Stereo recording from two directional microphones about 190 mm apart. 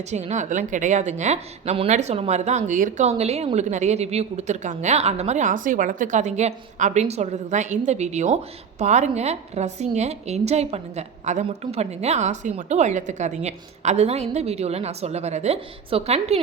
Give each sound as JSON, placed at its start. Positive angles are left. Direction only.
{"t": 0.0, "sound": "a woman's voice", "side_deg": -35}